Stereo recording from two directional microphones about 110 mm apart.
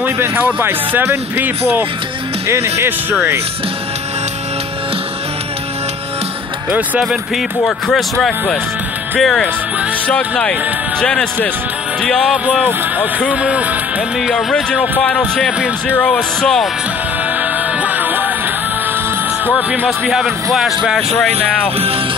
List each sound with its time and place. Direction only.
0.0 s speech: 15° right (ahead or behind)
6.7 s speech: 5° right (ahead or behind)
13.3 s speech: 10° right (ahead or behind)
14.3 s speech: 10° left (ahead or behind)
17.4 s music: 15° right (ahead or behind)
19.5 s speech: 5° right (ahead or behind)
21.3 s speech: 65° right (ahead or behind)